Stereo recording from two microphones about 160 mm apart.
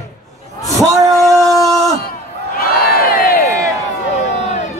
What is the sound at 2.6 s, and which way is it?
Crowd, 65° left (ahead or behind).